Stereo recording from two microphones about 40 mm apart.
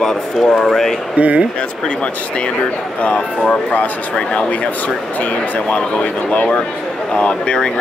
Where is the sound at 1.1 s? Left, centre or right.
Right.